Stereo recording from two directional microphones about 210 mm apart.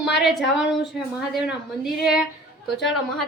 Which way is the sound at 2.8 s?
Centre (ahead or behind).